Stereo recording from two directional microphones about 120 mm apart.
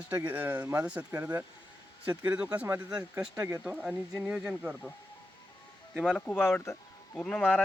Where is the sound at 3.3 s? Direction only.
20° right (ahead or behind).